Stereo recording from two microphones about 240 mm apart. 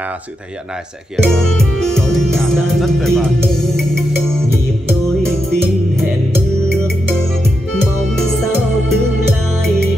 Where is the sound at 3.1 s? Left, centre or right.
Centre.